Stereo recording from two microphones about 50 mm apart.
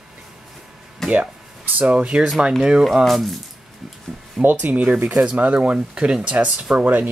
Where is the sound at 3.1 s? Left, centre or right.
Centre.